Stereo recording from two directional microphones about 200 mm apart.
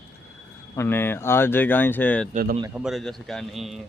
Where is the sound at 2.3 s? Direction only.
45° right (ahead or behind).